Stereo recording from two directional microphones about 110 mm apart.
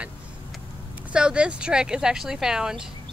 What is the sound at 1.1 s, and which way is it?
Speech, 10° right (ahead or behind).